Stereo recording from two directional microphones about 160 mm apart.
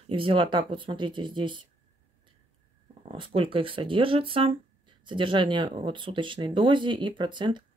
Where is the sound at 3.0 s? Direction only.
35° right (ahead or behind).